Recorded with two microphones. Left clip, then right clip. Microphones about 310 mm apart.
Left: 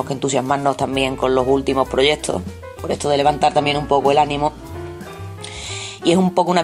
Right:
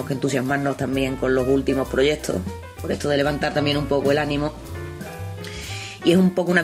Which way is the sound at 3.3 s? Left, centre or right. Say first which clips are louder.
Left 8 dB; left.